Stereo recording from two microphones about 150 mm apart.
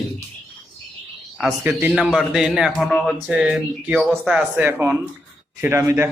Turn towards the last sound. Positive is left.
turn(degrees=-15)  # may be behind; listen again after turning